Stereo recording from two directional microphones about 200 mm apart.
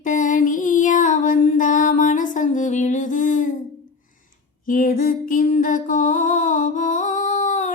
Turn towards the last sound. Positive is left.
turn(degrees=35)  # may be behind; listen again after turning